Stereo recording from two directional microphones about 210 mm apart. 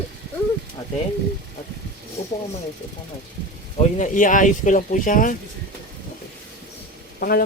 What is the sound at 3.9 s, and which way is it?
A man's voice, 35° left (ahead or behind).